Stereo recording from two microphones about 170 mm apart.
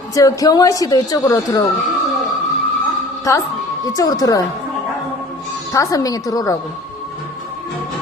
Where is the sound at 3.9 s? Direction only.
20° left (ahead or behind).